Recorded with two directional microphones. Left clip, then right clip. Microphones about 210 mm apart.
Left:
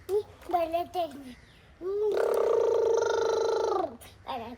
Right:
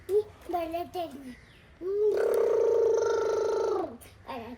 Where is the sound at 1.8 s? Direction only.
20° left (ahead or behind).